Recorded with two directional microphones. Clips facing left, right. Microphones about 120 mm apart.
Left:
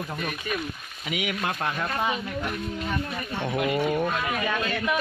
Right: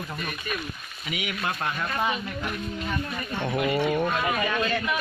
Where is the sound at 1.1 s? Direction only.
90° left.